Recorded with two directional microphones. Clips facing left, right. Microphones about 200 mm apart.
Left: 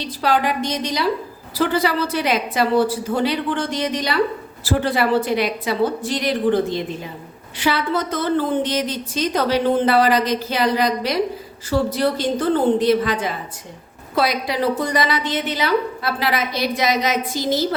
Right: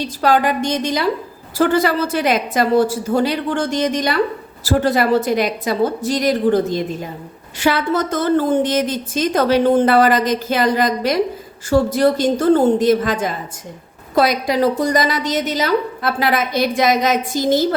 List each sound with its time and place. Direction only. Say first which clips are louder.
0.2 s a woman's voice: right 3 dB; 45° right (ahead or behind)